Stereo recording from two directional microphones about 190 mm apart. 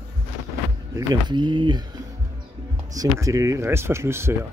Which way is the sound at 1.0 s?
25° right (ahead or behind).